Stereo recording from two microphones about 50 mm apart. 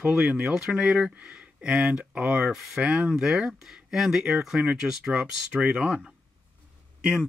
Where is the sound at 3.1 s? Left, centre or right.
Centre.